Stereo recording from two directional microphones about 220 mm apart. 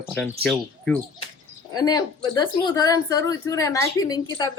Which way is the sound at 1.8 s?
20° left (ahead or behind).